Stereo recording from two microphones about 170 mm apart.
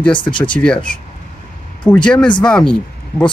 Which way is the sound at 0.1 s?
30° left (ahead or behind).